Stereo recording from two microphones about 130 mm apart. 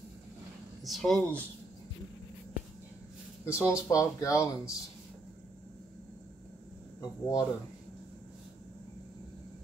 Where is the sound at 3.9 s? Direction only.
25° left (ahead or behind).